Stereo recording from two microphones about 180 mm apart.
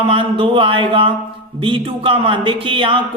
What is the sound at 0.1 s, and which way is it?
Speech, 30° right (ahead or behind).